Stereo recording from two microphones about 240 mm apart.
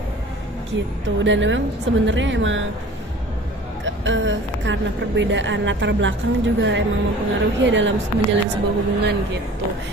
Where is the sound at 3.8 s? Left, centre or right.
Right.